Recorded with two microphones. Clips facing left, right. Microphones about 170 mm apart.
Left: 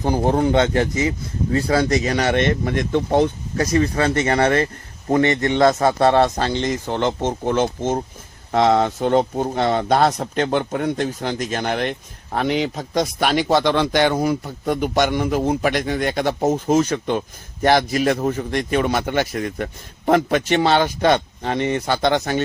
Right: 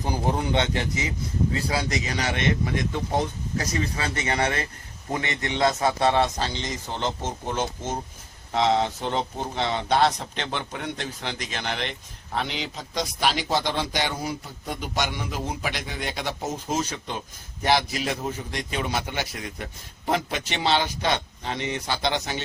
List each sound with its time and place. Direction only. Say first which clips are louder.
0.0 s a man's voice: left 8 dB; 50° left (ahead or behind)